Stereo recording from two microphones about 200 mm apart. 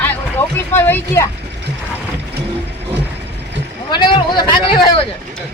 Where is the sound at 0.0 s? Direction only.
10° left (ahead or behind).